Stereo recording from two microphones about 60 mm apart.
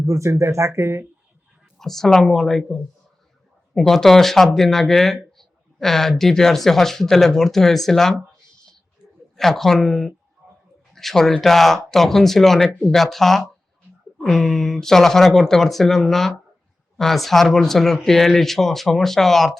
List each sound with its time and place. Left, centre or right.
0.0 s speech: right
1.8 s speech: centre
9.3 s speech: centre